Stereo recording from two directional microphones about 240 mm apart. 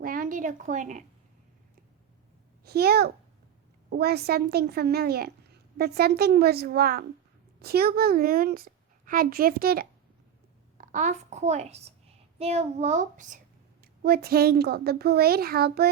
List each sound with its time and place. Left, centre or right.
0.0 s speech: right
2.6 s a woman's voice: right